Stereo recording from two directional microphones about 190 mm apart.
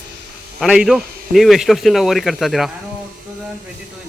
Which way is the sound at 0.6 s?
Centre (ahead or behind).